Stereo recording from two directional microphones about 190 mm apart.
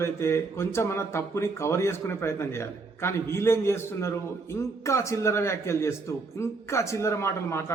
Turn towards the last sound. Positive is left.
turn(degrees=15)  # may be behind; listen again after turning